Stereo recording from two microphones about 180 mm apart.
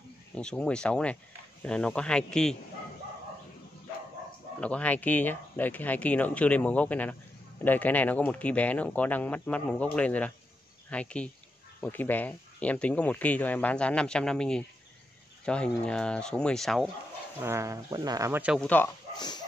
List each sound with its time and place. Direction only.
0.3 s speech: 5° left (ahead or behind)
4.6 s speech: 5° left (ahead or behind)
17.4 s speech: 15° right (ahead or behind)
18.6 s speech: 10° left (ahead or behind)
19.1 s dog: 25° left (ahead or behind)